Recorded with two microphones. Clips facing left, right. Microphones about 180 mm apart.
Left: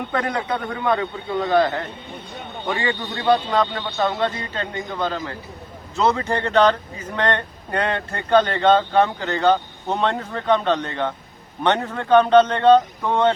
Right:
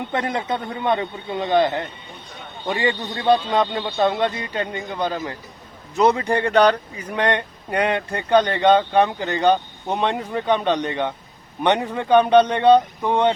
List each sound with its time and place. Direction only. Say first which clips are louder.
0.1 s speech: even; 20° right (ahead or behind)